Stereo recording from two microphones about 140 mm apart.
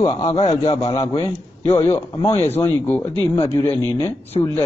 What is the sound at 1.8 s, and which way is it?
A man's voice, 20° left (ahead or behind).